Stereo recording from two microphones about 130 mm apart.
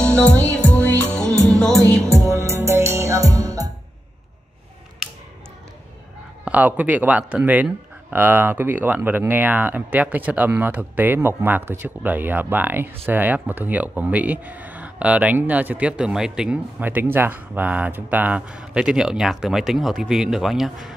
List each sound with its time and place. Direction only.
0.0 s music: 10° left (ahead or behind)
2.1 s music: 20° right (ahead or behind)
6.4 s speech: 10° right (ahead or behind)